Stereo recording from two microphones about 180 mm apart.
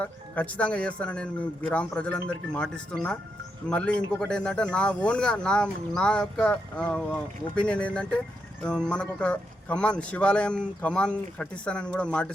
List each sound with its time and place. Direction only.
0.0 s speech: 10° left (ahead or behind)